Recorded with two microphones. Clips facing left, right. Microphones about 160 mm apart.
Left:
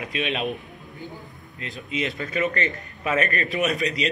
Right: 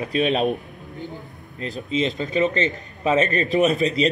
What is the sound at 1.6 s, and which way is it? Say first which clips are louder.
Speech: right 6 dB; 35° right (ahead or behind).